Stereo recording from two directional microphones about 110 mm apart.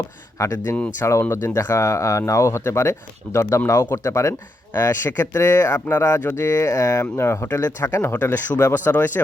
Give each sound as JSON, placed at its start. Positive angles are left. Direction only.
{"t": 0.3, "sound": "speech", "side_deg": 25}